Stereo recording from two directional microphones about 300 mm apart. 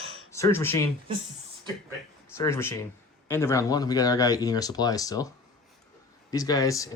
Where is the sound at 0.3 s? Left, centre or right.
Centre.